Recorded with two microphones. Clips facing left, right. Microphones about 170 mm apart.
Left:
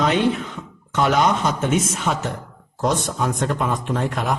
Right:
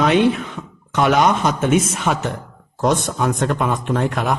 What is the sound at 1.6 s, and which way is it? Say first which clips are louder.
Speech: right 5 dB; 65° right (ahead or behind).